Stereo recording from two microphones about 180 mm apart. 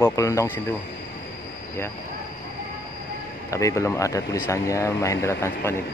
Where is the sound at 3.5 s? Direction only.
15° left (ahead or behind).